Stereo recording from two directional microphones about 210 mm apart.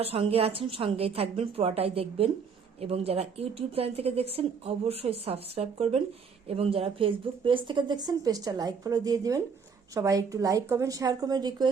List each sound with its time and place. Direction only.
0.0 s a woman's voice: 25° right (ahead or behind)